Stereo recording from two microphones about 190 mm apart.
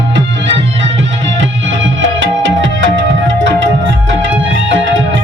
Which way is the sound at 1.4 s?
75° right (ahead or behind).